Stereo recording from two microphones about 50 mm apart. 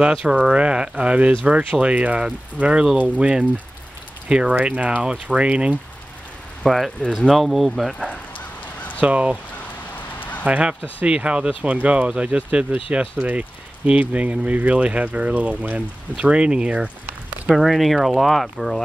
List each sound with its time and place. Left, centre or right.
0.0 s speech: centre
6.6 s speech: centre
9.0 s speech: right
10.4 s speech: right
17.5 s speech: centre